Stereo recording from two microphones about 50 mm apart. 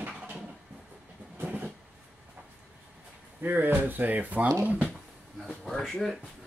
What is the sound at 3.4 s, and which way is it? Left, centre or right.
Speech, right.